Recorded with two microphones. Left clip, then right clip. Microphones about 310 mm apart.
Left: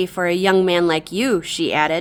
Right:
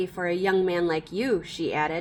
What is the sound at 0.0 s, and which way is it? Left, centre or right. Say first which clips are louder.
A woman's voice: left 8 dB; left.